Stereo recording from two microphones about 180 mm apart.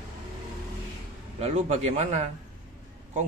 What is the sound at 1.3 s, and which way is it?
Speech, 40° right (ahead or behind).